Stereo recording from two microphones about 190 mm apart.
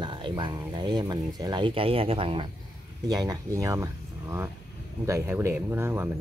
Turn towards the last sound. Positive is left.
turn(degrees=-10)  # may be behind; listen again after turning